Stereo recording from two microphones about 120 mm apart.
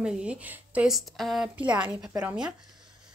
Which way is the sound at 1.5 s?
10° right (ahead or behind).